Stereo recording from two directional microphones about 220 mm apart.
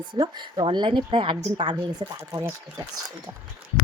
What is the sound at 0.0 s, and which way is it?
A woman's voice, 20° right (ahead or behind).